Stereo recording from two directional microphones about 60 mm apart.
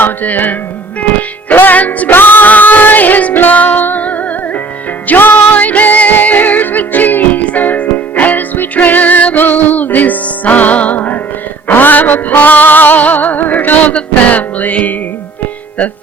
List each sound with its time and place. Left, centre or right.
0.0 s music: left
1.5 s music: left